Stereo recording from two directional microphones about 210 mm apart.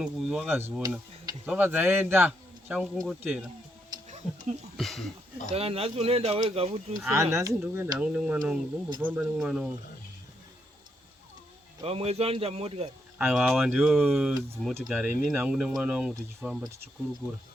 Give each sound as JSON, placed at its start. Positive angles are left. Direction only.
{"t": 0.0, "sound": "a man's voice", "side_deg": -5}
{"t": 4.2, "sound": "speech", "side_deg": 25}
{"t": 4.8, "sound": "speech", "side_deg": 0}
{"t": 5.5, "sound": "speech", "side_deg": -30}
{"t": 7.1, "sound": "a man's voice", "side_deg": -15}
{"t": 11.8, "sound": "speech", "side_deg": -30}
{"t": 13.1, "sound": "speech", "side_deg": -5}